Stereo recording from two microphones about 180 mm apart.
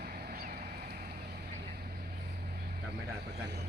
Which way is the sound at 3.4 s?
65° right (ahead or behind).